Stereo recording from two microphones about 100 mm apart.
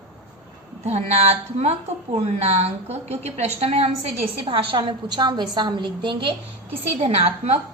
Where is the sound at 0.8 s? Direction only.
90° right; by 4.8 s 65° right (ahead or behind).